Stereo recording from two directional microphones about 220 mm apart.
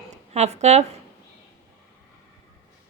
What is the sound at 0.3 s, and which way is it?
Speech, 30° right (ahead or behind).